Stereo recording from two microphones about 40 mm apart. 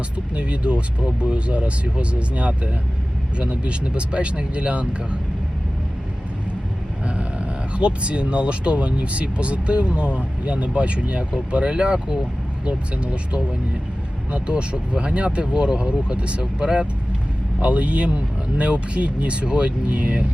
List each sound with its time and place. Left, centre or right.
0.3 s speech: right
7.2 s speech: right
17.6 s speech: right